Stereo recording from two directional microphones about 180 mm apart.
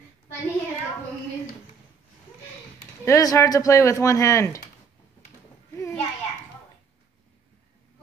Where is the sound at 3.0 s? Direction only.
20° left (ahead or behind).